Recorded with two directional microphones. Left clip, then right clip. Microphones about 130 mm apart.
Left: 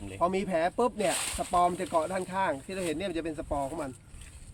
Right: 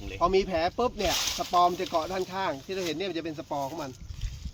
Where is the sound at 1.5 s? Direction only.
10° left (ahead or behind).